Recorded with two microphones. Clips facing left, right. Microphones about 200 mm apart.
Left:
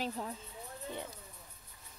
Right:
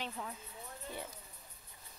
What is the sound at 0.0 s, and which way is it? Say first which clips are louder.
Speech: left 5 dB; 30° left (ahead or behind).